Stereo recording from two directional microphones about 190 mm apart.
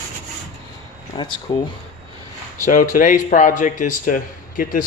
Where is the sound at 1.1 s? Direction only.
25° left (ahead or behind).